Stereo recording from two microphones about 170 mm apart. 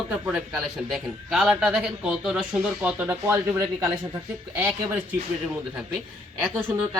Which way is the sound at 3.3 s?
20° right (ahead or behind).